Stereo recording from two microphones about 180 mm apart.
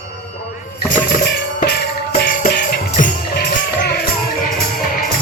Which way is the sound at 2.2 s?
55° left (ahead or behind).